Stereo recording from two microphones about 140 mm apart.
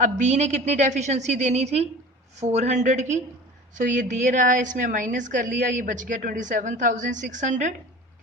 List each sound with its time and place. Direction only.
0.0 s a woman's voice: 60° right (ahead or behind)